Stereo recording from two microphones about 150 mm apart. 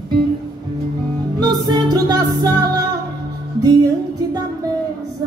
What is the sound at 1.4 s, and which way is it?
Music, 30° right (ahead or behind).